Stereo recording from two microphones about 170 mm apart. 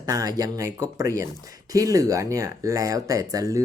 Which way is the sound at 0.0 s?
20° right (ahead or behind).